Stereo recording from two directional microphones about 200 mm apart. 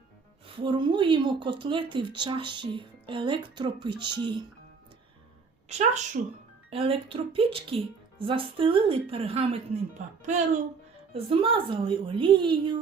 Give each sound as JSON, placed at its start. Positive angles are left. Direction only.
{"t": 0.4, "sound": "speech", "side_deg": -25}
{"t": 5.6, "sound": "a woman's voice", "side_deg": -35}